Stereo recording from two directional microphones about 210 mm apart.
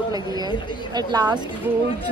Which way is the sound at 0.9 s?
20° right (ahead or behind).